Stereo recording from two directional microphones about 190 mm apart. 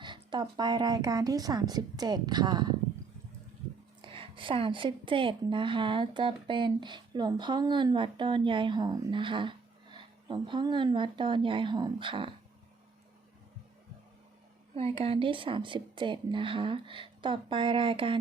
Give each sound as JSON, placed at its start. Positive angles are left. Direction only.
{"t": 0.0, "sound": "a woman's voice", "side_deg": -25}
{"t": 4.0, "sound": "a woman's voice", "side_deg": -30}
{"t": 14.8, "sound": "a woman's voice", "side_deg": -30}